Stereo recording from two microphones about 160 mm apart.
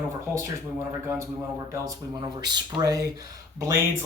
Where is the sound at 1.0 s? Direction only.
15° right (ahead or behind).